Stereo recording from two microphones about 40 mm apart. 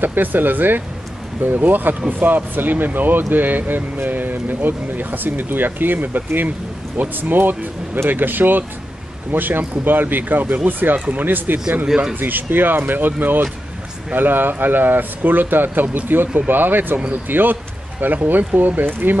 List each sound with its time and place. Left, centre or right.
0.0 s speech: right
11.9 s speech: right
12.2 s speech: right